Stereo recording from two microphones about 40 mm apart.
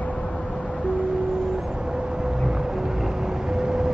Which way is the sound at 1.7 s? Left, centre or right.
Right.